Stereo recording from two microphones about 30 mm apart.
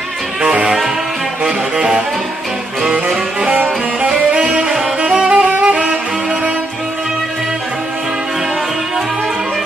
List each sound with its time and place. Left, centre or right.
0.4 s music: right
3.5 s music: right
4.4 s saxophone: right
5.0 s music: right